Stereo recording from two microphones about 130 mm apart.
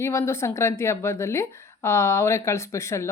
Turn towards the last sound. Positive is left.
turn(degrees=20)  # may be behind; listen again after turning